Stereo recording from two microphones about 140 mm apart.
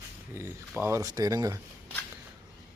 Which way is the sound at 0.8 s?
20° right (ahead or behind).